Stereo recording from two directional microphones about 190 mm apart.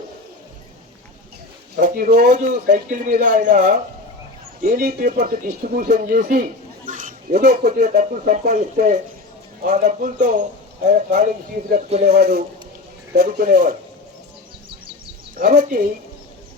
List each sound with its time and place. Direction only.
1.7 s speech: 50° right (ahead or behind)
15.4 s speech: 45° right (ahead or behind)